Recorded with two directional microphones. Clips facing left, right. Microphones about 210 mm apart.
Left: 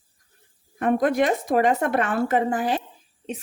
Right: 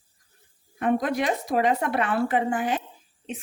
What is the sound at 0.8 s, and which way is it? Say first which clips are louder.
Speech: left 4 dB; 50° left (ahead or behind).